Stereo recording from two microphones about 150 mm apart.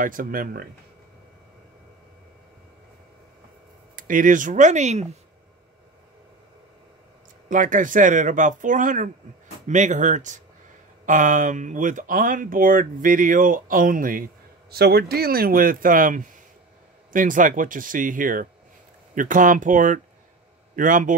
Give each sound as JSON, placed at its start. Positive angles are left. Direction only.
{"t": 0.0, "sound": "speech", "side_deg": -65}
{"t": 3.9, "sound": "speech", "side_deg": -65}
{"t": 7.4, "sound": "speech", "side_deg": -60}
{"t": 14.7, "sound": "speech", "side_deg": -90}